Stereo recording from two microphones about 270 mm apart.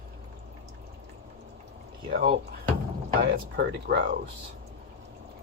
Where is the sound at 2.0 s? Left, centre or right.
Right.